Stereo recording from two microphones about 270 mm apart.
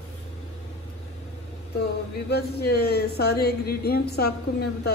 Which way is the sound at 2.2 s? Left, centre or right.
Left.